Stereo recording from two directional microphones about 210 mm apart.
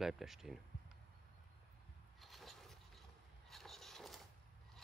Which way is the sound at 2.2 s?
Centre (ahead or behind).